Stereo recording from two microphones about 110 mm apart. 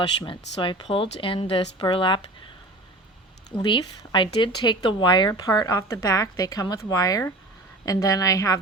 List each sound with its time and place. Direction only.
0.2 s a woman's voice: 50° left (ahead or behind)
3.6 s a woman's voice: 45° left (ahead or behind)